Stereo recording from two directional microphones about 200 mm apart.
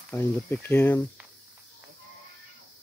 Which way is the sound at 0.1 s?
10° left (ahead or behind).